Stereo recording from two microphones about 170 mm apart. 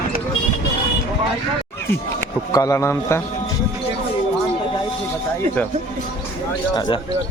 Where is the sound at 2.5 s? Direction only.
20° left (ahead or behind).